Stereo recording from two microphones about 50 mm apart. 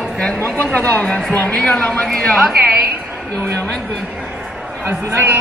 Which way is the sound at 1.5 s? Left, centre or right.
Left.